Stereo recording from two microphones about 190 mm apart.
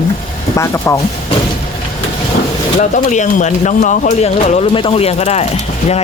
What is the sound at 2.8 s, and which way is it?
Speech, 40° left (ahead or behind).